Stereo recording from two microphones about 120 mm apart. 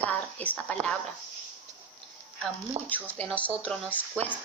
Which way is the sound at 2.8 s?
60° right (ahead or behind).